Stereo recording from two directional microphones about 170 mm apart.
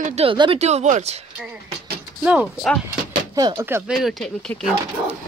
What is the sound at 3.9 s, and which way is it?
Speech, centre (ahead or behind).